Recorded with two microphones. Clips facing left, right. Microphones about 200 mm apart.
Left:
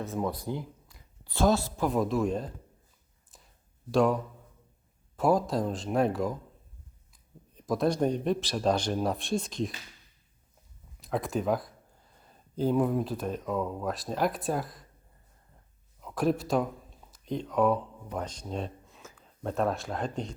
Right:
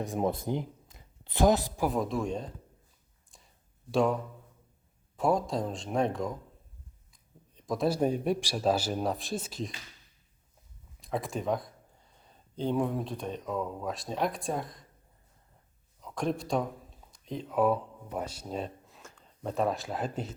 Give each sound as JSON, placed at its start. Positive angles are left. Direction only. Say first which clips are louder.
{"t": 0.0, "sound": "speech", "louder": "right 2 dB", "side_deg": -20}
{"t": 1.9, "sound": "speech", "louder": "left 6 dB", "side_deg": 0}
{"t": 3.3, "sound": "a sound", "louder": "left 2 dB", "side_deg": 0}
{"t": 3.9, "sound": "speech", "louder": "left 2 dB", "side_deg": 0}
{"t": 11.0, "sound": "speech", "louder": "left 3 dB", "side_deg": 0}
{"t": 16.0, "sound": "speech", "louder": "left 4 dB", "side_deg": 5}